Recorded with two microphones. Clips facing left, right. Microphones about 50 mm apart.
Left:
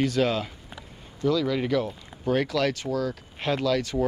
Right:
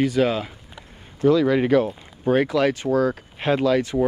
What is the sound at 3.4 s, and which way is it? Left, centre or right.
Speech, right.